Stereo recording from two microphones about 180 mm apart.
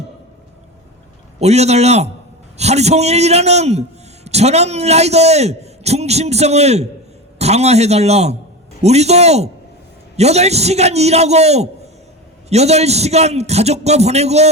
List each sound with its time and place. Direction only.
1.4 s a man's voice: 35° right (ahead or behind)